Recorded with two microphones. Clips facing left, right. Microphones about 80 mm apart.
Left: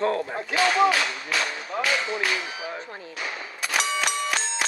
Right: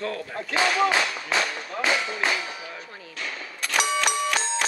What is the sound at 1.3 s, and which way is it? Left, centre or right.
Speech, right.